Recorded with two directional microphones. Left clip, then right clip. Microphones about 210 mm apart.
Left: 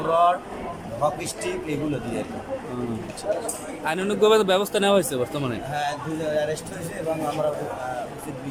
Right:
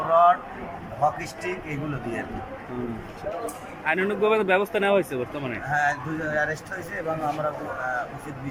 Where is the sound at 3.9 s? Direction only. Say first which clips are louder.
Left 3 dB; 15° left (ahead or behind).